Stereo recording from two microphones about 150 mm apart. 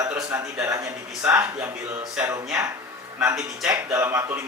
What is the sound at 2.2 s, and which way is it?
Speech, 5° right (ahead or behind).